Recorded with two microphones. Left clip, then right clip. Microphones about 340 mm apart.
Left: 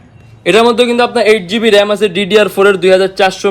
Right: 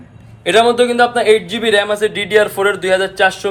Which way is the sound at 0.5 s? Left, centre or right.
Left.